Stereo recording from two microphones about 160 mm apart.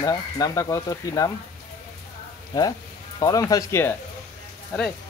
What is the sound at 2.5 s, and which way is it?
Speech, 25° left (ahead or behind).